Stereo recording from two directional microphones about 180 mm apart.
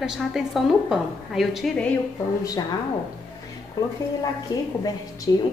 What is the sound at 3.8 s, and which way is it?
A woman's voice, 20° left (ahead or behind).